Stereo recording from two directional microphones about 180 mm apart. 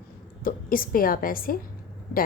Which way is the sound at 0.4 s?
50° left (ahead or behind).